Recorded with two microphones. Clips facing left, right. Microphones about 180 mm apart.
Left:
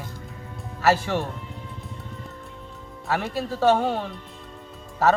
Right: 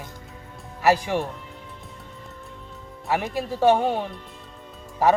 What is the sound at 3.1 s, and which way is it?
Speech, 15° right (ahead or behind).